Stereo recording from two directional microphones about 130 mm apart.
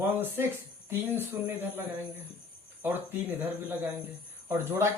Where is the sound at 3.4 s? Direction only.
15° right (ahead or behind).